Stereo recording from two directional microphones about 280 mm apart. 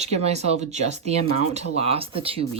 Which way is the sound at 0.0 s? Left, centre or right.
Right.